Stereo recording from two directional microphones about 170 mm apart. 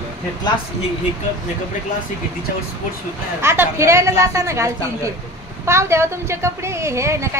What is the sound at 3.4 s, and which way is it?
A woman's voice, 15° right (ahead or behind).